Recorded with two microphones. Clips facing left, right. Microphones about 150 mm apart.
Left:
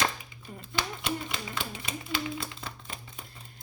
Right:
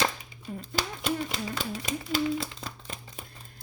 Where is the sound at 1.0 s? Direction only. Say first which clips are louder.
Right 4 dB; 40° right (ahead or behind).